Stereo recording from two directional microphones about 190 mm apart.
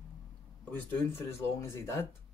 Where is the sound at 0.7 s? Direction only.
10° left (ahead or behind).